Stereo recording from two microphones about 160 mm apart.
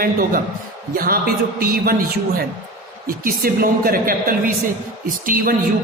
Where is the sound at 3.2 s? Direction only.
65° right (ahead or behind).